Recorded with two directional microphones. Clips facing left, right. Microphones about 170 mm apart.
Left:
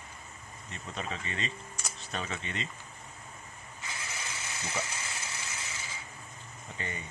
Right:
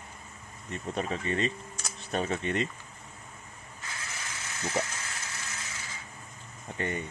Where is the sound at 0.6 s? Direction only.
50° right (ahead or behind).